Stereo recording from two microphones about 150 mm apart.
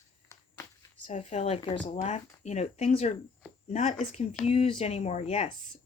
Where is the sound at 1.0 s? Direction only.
50° left (ahead or behind).